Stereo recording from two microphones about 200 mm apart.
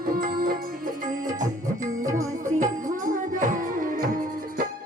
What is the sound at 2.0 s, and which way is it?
Music, 15° right (ahead or behind).